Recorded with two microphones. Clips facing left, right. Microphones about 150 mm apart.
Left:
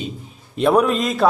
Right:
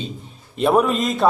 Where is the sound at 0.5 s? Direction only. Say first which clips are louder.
Left 1 dB; centre (ahead or behind).